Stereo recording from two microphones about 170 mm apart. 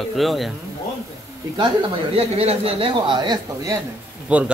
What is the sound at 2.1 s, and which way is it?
A man's voice, 35° right (ahead or behind).